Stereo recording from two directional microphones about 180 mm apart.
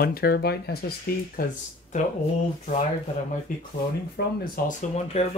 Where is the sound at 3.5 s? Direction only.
45° left (ahead or behind).